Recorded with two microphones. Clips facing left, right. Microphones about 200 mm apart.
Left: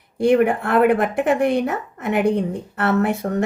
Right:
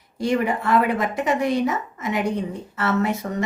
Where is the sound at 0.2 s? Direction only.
60° left (ahead or behind).